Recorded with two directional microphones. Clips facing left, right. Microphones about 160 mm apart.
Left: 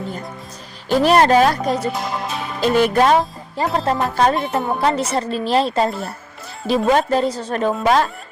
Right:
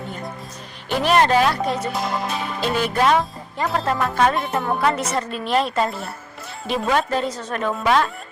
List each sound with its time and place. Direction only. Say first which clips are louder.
0.9 s music: left 4 dB; 35° left (ahead or behind)
1.9 s speech: even; centre (ahead or behind)
2.6 s music: left 6 dB; 45° left (ahead or behind)